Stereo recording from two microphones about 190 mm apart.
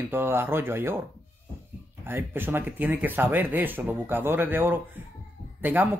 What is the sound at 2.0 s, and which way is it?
Speech, 10° right (ahead or behind).